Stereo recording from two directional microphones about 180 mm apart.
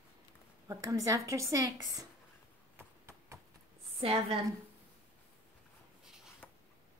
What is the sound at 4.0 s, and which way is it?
Speech, 35° right (ahead or behind).